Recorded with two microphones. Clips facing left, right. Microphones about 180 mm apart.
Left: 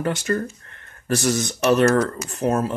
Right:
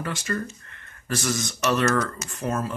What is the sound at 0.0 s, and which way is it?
Speech, 40° left (ahead or behind).